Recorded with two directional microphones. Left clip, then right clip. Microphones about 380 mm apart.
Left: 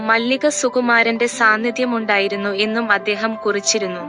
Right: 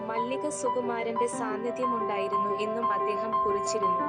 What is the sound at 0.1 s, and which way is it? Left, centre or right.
A woman's voice, left.